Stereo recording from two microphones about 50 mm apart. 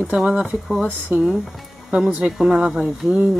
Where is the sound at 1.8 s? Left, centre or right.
Right.